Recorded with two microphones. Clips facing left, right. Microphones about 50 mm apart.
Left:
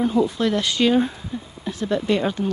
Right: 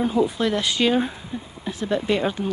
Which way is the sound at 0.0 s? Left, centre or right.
Centre.